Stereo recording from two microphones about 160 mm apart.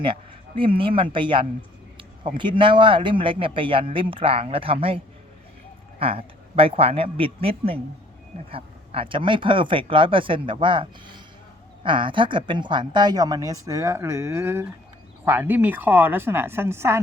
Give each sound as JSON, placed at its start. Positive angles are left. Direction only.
{"t": 0.0, "sound": "speech", "side_deg": -30}
{"t": 6.0, "sound": "a woman's voice", "side_deg": -35}